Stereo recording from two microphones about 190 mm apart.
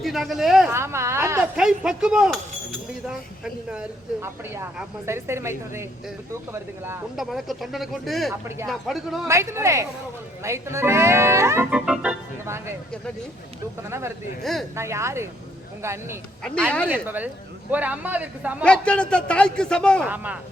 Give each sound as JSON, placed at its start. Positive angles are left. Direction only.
{"t": 0.0, "sound": "a man's voice", "side_deg": 0}
{"t": 0.7, "sound": "speech", "side_deg": -15}
{"t": 1.5, "sound": "a man's voice", "side_deg": -5}
{"t": 7.2, "sound": "a man's voice", "side_deg": 0}
{"t": 8.3, "sound": "speech", "side_deg": -15}
{"t": 8.6, "sound": "a man's voice", "side_deg": 0}
{"t": 9.2, "sound": "speech", "side_deg": -15}
{"t": 14.5, "sound": "a man's voice", "side_deg": 0}
{"t": 14.8, "sound": "speech", "side_deg": -15}
{"t": 18.6, "sound": "a man's voice", "side_deg": 5}
{"t": 20.1, "sound": "speech", "side_deg": -10}